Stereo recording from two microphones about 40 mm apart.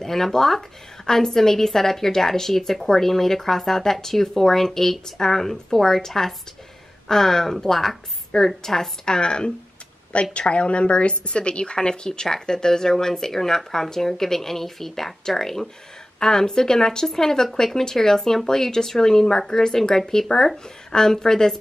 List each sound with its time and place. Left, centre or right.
0.0 s a woman's voice: centre